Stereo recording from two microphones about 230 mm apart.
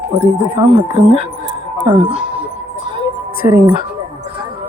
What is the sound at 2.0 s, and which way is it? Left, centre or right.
Speech, centre.